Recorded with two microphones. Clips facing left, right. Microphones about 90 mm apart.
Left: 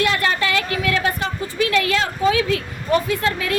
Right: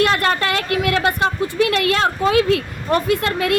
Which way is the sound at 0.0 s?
55° right (ahead or behind).